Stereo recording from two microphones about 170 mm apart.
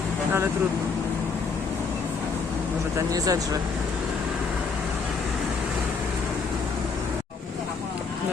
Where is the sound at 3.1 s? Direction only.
20° right (ahead or behind).